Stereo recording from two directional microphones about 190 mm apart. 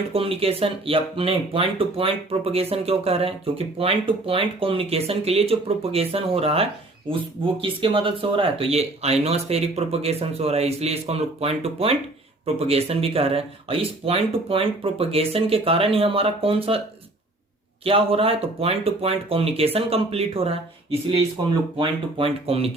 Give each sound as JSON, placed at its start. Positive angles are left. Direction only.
{"t": 0.1, "sound": "speech", "side_deg": -30}
{"t": 17.8, "sound": "speech", "side_deg": -30}
{"t": 21.8, "sound": "speech", "side_deg": -30}